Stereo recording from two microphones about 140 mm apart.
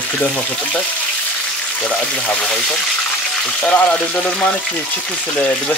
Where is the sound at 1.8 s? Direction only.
5° left (ahead or behind).